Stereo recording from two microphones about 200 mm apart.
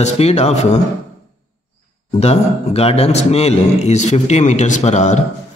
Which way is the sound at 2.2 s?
30° left (ahead or behind).